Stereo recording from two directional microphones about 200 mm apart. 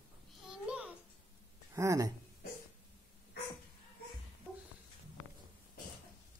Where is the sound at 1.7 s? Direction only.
15° right (ahead or behind).